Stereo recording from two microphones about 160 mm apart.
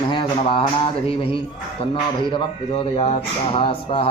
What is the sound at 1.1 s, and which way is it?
Speech, 35° left (ahead or behind).